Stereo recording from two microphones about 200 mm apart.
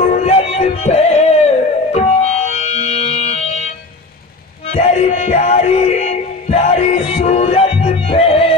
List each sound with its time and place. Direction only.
0.0 s music: 35° left (ahead or behind)
4.6 s music: 35° left (ahead or behind)